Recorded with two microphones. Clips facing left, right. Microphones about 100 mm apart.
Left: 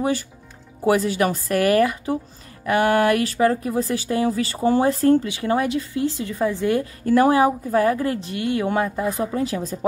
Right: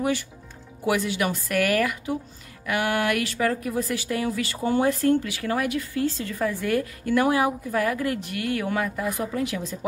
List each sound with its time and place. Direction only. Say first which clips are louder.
0.8 s speech: left 5 dB; 40° left (ahead or behind)
5.3 s a woman's voice: left 4 dB; 25° left (ahead or behind)
7.1 s a woman's voice: left 6 dB; 35° left (ahead or behind)